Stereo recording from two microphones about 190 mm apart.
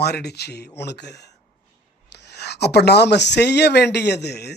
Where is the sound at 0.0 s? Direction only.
60° left (ahead or behind).